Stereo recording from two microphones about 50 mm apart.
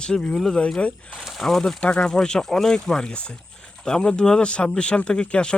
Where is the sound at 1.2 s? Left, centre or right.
Centre.